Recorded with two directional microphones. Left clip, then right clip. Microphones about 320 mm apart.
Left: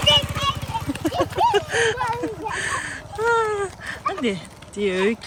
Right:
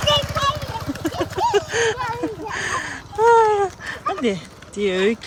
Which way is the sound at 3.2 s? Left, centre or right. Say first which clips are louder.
Right 7 dB; centre.